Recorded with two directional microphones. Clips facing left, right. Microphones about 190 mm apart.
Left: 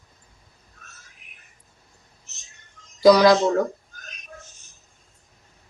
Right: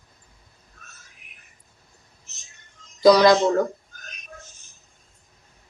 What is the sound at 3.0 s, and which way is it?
Speech, 5° left (ahead or behind).